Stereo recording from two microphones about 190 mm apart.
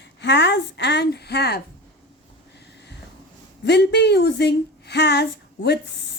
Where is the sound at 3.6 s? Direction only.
60° left (ahead or behind).